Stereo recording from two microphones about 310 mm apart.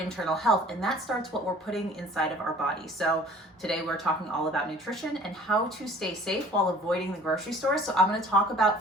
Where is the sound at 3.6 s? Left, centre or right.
Centre.